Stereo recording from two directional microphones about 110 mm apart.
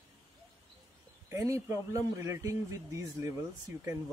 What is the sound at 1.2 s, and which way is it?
Speech, 30° right (ahead or behind).